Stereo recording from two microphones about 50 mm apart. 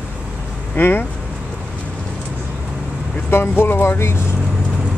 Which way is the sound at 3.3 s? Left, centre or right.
Left.